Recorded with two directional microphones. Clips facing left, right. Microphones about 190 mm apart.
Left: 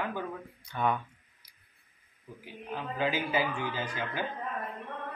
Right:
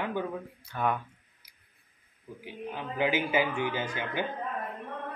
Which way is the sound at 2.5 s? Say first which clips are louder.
Right 1 dB; 20° right (ahead or behind).